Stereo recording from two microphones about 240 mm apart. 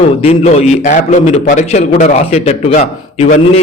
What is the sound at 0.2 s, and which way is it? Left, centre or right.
A man's voice, left.